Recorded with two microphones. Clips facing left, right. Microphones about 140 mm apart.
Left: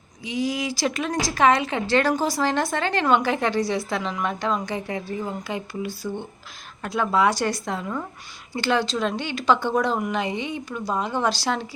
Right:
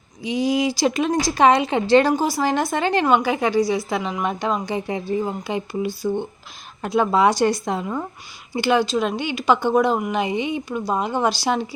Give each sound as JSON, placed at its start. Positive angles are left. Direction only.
{"t": 0.3, "sound": "a woman's voice", "side_deg": -20}